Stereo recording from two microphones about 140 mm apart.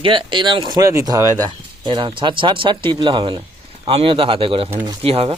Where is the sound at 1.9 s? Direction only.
35° right (ahead or behind).